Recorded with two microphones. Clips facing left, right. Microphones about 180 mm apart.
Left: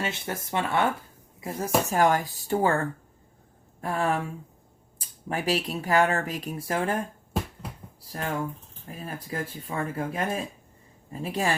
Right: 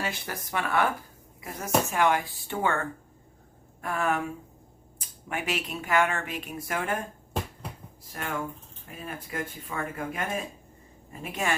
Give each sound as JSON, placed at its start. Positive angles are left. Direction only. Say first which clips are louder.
{"t": 0.0, "sound": "speech", "louder": "left 2 dB", "side_deg": 25}
{"t": 8.0, "sound": "speech", "louder": "left 3 dB", "side_deg": 35}